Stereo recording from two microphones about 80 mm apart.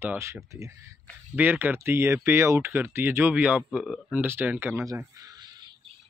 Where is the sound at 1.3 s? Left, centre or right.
Right.